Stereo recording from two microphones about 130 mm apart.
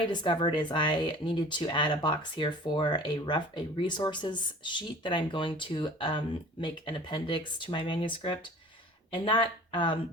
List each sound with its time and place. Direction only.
0.1 s speech: 35° left (ahead or behind)